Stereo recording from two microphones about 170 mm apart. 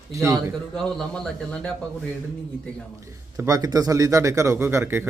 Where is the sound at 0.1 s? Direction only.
15° right (ahead or behind).